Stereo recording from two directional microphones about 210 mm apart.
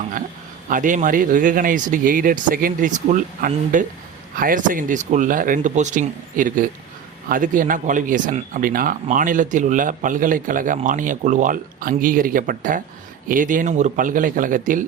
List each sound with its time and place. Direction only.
0.7 s speech: 40° right (ahead or behind)